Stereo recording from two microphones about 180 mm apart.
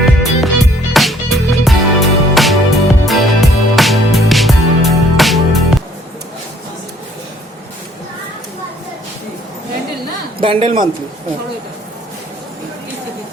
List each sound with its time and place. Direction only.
0.0 s music: centre (ahead or behind)
10.4 s a man's voice: 30° right (ahead or behind)